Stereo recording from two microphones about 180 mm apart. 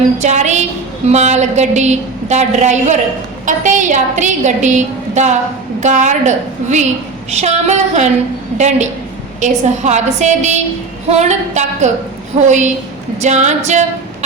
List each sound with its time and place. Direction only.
0.2 s a woman's voice: 40° right (ahead or behind)
13.2 s female singing: 40° right (ahead or behind)